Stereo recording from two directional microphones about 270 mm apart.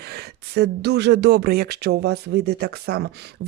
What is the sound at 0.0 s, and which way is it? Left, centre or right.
Speech, right.